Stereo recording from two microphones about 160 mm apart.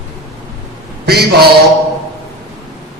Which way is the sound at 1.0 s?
80° right.